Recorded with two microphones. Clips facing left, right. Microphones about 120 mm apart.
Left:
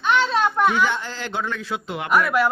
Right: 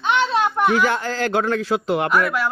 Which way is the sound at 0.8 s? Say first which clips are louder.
Right 3 dB; 45° right (ahead or behind).